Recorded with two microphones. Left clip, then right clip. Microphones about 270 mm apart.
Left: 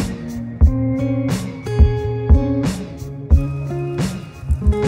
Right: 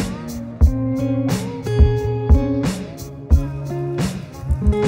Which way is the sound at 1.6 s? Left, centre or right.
Left.